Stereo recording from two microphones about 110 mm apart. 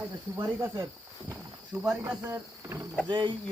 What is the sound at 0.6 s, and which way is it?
Speech, 25° right (ahead or behind).